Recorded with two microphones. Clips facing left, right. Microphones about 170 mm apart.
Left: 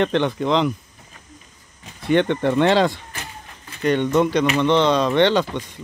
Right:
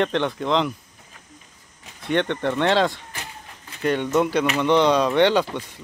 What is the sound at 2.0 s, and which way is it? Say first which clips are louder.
Speech: left 4 dB; centre (ahead or behind).